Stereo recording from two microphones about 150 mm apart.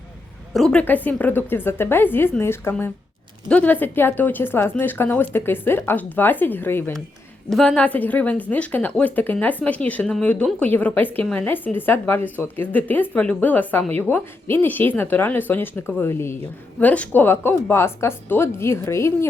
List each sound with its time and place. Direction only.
0.5 s a woman's voice: 5° left (ahead or behind)